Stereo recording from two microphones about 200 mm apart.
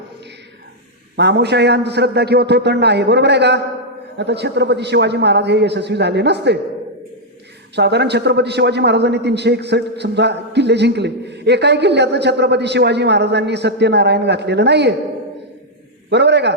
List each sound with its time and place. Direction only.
1.1 s a man's voice: 60° right (ahead or behind)
7.8 s a man's voice: 55° right (ahead or behind)
16.0 s a man's voice: 60° right (ahead or behind)